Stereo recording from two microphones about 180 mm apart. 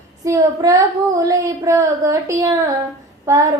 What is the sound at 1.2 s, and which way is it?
Child singing, 15° right (ahead or behind).